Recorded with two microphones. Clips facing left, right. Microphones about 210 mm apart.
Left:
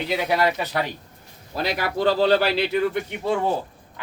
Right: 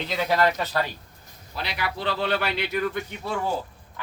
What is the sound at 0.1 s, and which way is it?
Speech, 10° left (ahead or behind).